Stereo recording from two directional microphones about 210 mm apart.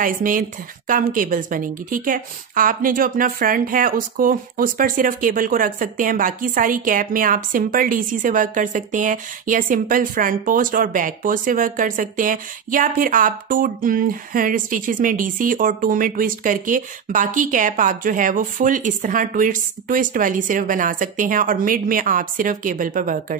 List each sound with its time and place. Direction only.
0.0 s a woman's voice: 40° right (ahead or behind)